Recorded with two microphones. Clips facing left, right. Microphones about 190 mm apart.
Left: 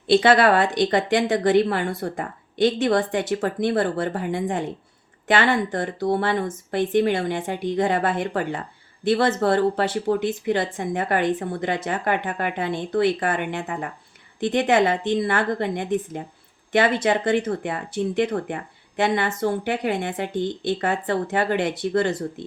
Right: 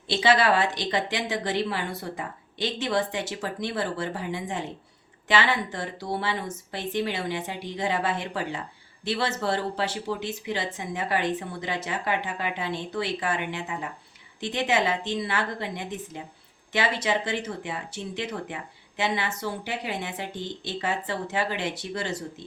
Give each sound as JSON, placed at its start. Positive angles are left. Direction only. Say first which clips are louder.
{"t": 0.1, "sound": "speech", "louder": "left 6 dB", "side_deg": 55}